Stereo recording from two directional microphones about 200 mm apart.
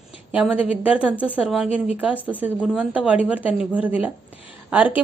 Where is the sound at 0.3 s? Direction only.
5° right (ahead or behind).